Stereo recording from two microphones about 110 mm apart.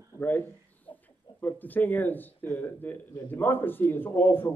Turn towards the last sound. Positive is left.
turn(degrees=20)  # may be behind; listen again after turning